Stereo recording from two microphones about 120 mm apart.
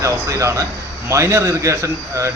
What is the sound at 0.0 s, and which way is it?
A man's voice, 25° right (ahead or behind).